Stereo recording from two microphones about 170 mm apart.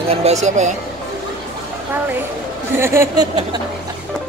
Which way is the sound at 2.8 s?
15° right (ahead or behind).